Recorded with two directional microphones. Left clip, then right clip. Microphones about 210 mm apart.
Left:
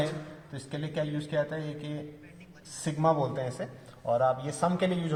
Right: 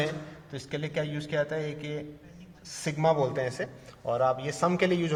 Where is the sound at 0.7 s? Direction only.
40° right (ahead or behind).